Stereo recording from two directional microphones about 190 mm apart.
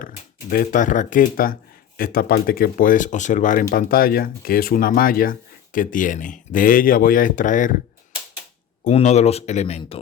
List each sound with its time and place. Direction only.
0.5 s speech: 45° left (ahead or behind)
8.8 s speech: 35° left (ahead or behind)